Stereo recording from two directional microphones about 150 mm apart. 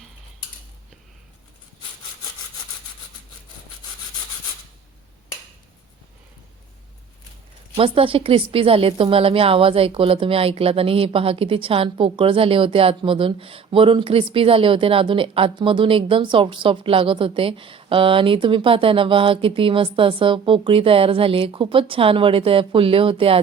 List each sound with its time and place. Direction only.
7.8 s a woman's voice: 35° right (ahead or behind)